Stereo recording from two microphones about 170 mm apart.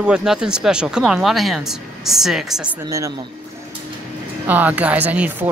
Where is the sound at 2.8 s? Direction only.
20° right (ahead or behind).